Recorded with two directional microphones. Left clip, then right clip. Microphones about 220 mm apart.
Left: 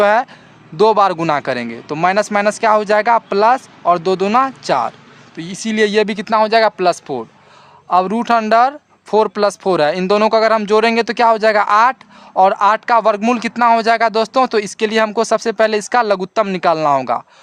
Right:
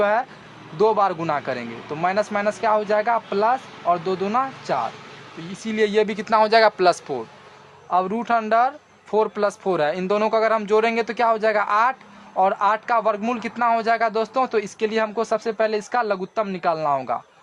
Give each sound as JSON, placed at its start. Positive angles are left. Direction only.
{"t": 0.0, "sound": "speech", "side_deg": 40}